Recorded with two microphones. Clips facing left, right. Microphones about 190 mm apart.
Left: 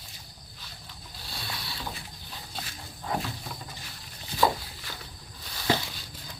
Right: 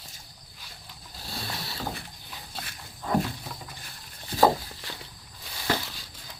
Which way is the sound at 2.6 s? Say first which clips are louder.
Right 3 dB; 50° right (ahead or behind).